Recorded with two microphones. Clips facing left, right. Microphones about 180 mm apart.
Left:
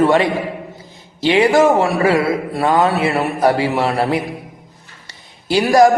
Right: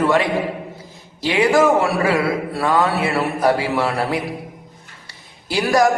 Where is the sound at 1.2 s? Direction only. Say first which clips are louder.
Left 3 dB; 25° left (ahead or behind).